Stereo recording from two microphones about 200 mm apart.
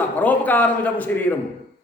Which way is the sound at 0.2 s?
10° left (ahead or behind).